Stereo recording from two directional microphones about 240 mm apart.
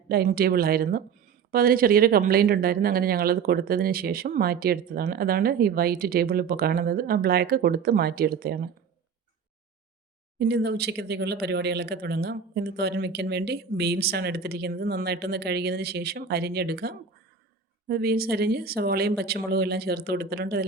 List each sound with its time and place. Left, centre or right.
0.1 s speech: right
10.3 s speech: right